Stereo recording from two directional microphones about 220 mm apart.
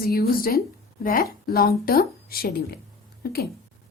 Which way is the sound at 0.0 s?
45° left (ahead or behind).